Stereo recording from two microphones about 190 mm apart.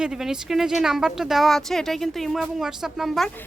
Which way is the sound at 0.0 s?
5° right (ahead or behind).